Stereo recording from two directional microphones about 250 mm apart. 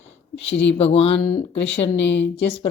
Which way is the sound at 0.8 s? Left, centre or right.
Left.